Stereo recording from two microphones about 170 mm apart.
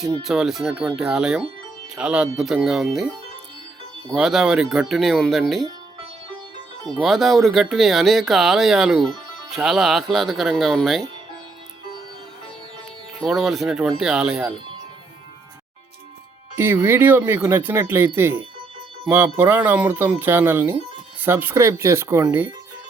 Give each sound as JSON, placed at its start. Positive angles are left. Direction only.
{"t": 0.2, "sound": "speech", "side_deg": 0}
{"t": 4.1, "sound": "speech", "side_deg": 0}
{"t": 6.8, "sound": "speech", "side_deg": 0}
{"t": 13.1, "sound": "speech", "side_deg": 0}
{"t": 16.6, "sound": "speech", "side_deg": -15}